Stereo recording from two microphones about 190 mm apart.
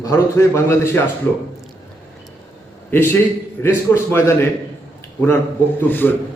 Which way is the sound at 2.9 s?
10° left (ahead or behind).